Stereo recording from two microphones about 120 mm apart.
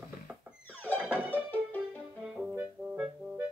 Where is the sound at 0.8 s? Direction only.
15° left (ahead or behind).